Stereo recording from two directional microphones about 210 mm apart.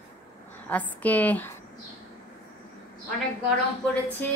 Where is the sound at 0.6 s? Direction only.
5° left (ahead or behind).